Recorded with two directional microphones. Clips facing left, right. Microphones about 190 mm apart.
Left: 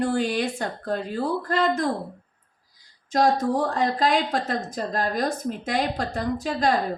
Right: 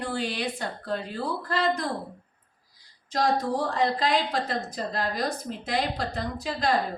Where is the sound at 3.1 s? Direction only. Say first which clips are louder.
Left 4 dB; 45° left (ahead or behind).